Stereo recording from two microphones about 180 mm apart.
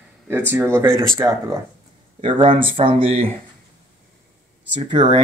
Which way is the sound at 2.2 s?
25° right (ahead or behind).